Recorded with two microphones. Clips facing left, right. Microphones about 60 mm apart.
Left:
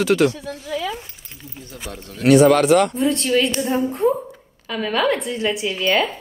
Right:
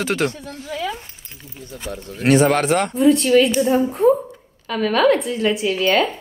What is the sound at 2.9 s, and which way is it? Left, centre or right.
A woman's voice, centre.